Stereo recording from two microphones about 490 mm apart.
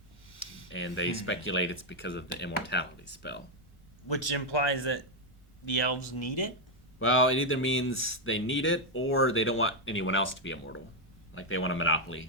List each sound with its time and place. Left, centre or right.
0.7 s speech: left
4.1 s a man's voice: left
7.0 s speech: left